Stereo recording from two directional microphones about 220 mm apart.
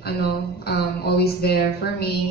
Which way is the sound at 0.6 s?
45° left (ahead or behind).